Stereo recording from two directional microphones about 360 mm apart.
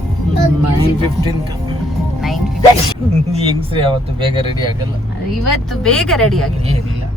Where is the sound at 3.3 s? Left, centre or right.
Centre.